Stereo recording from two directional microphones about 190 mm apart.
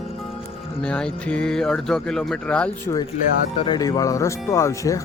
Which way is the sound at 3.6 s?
25° left (ahead or behind).